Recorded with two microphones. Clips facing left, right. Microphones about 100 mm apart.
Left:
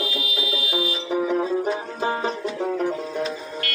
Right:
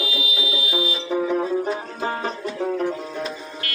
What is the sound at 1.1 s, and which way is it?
Music, 10° left (ahead or behind).